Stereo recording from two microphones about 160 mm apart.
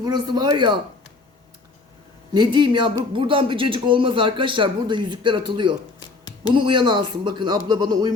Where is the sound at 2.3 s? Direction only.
30° right (ahead or behind).